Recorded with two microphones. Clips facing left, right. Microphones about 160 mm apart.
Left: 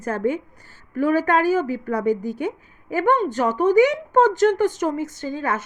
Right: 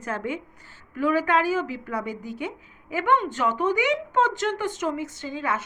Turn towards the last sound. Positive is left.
turn(degrees=45)  # may be behind; listen again after turning